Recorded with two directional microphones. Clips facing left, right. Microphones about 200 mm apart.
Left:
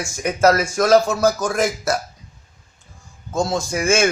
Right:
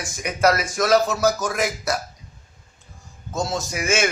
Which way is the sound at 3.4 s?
50° left (ahead or behind).